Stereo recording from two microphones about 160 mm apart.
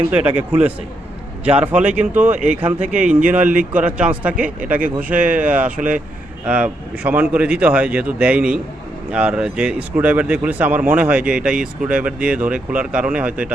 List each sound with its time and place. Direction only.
0.1 s speech: 10° right (ahead or behind)
1.5 s speech: 10° right (ahead or behind)
2.2 s speech: 50° right (ahead or behind)
3.2 s speech: 10° right (ahead or behind)